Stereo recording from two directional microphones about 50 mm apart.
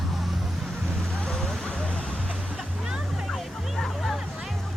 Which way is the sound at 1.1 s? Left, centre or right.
Centre.